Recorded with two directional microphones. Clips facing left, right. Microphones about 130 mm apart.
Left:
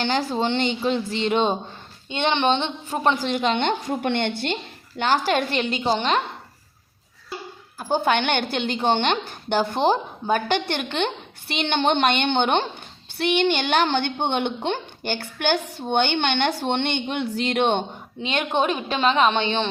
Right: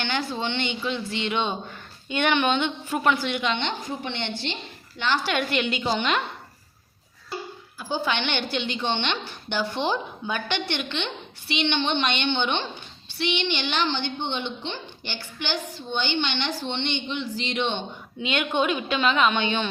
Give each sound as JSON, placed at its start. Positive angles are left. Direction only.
{"t": 0.0, "sound": "a woman's voice", "side_deg": 40}
{"t": 2.0, "sound": "a woman's voice", "side_deg": 25}
{"t": 4.9, "sound": "a woman's voice", "side_deg": 45}
{"t": 7.8, "sound": "a woman's voice", "side_deg": 50}
{"t": 18.2, "sound": "a woman's voice", "side_deg": 35}